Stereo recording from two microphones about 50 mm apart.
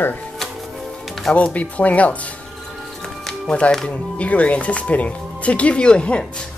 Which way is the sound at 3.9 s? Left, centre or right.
Left.